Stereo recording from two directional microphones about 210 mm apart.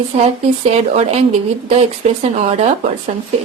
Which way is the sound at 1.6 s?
30° right (ahead or behind).